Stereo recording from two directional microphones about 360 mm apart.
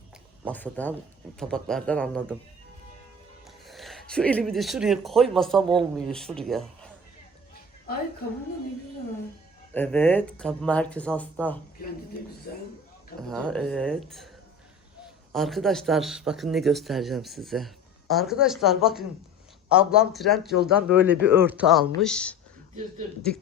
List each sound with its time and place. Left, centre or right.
0.4 s speech: centre
3.4 s speech: centre
9.7 s speech: centre
12.5 s speech: left
13.2 s speech: centre
15.3 s speech: centre
20.6 s speech: right
21.0 s speech: centre